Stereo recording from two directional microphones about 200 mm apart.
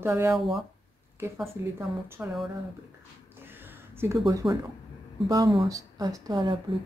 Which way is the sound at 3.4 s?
10° right (ahead or behind).